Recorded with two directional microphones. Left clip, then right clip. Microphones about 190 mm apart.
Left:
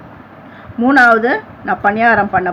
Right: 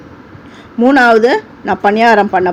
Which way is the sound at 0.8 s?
25° right (ahead or behind).